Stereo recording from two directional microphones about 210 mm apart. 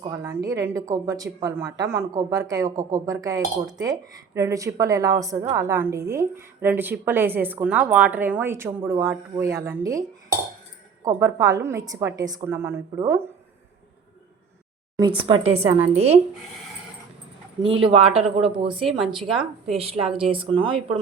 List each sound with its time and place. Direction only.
0.2 s a woman's voice: 15° right (ahead or behind)
11.0 s a woman's voice: 15° right (ahead or behind)
14.9 s speech: 20° right (ahead or behind)
17.6 s speech: 25° right (ahead or behind)
18.9 s speech: centre (ahead or behind)
19.7 s speech: 30° right (ahead or behind)